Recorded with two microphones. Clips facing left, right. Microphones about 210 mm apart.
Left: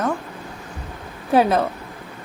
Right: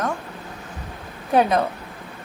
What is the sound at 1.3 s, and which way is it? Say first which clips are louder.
Speech: left 2 dB; centre (ahead or behind).